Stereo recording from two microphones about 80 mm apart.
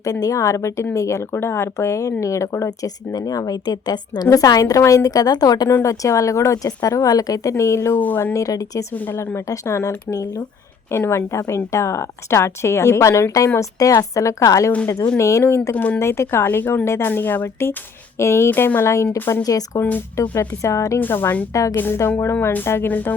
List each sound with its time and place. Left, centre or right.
0.0 s a woman's voice: left
4.3 s speech: left
5.6 s a woman's voice: left
7.9 s speech: left
8.3 s speech: left
9.0 s a woman's voice: left
15.7 s speech: centre
16.0 s a woman's voice: left
19.4 s a woman's voice: left
21.0 s speech: left
21.5 s speech: left
21.8 s a woman's voice: left
22.9 s speech: left